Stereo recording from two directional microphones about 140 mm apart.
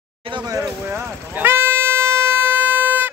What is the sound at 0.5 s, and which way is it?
Speech, 20° right (ahead or behind).